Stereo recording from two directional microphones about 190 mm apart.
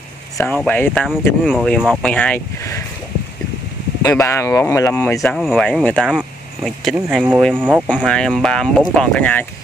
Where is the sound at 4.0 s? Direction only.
15° left (ahead or behind).